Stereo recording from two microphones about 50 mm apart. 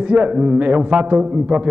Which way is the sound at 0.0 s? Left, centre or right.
Right.